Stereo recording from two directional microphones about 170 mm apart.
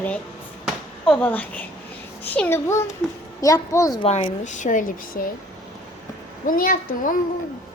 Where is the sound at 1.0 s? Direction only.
5° left (ahead or behind).